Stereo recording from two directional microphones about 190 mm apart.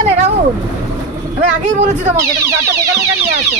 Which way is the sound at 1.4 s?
40° right (ahead or behind).